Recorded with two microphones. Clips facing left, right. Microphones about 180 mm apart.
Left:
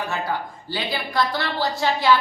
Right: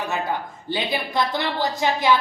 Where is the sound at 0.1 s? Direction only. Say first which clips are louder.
Right 1 dB; 20° right (ahead or behind).